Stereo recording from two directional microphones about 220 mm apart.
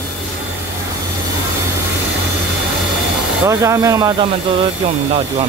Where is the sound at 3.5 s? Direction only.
15° right (ahead or behind).